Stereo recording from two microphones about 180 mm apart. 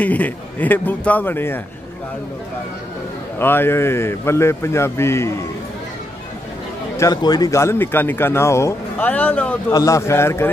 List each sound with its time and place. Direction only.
0.0 s speech: 10° left (ahead or behind)
3.3 s speech: 10° left (ahead or behind)
7.0 s speech: 20° left (ahead or behind)
9.7 s speech: 20° left (ahead or behind)